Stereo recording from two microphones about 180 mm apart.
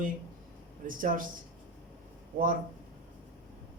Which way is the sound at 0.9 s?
50° right (ahead or behind).